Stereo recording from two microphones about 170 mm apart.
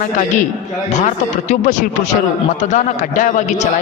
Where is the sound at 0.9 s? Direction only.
45° left (ahead or behind).